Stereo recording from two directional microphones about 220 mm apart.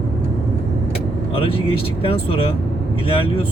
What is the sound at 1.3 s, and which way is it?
Speech, 25° left (ahead or behind).